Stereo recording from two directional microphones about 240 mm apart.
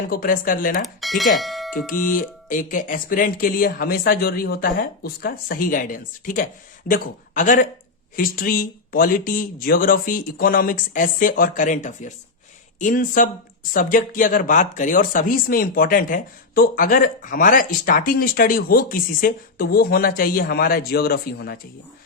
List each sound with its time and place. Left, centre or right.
0.1 s speech: left
1.0 s speech: centre
1.9 s speech: left